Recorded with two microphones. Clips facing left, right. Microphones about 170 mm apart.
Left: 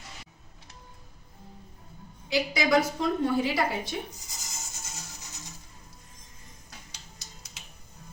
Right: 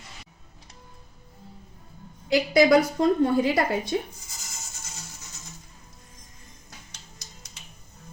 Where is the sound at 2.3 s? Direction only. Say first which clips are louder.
Right 6 dB; 55° right (ahead or behind).